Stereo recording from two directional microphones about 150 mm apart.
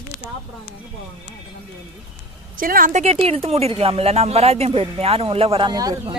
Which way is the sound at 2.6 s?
70° right (ahead or behind).